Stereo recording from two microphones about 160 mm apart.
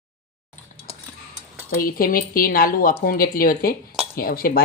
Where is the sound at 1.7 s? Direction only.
65° left (ahead or behind).